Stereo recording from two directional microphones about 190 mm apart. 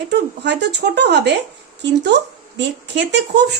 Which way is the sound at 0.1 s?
60° right (ahead or behind).